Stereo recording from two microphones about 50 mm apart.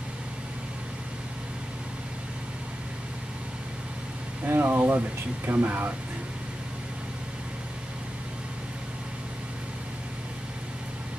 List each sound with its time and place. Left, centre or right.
4.5 s speech: right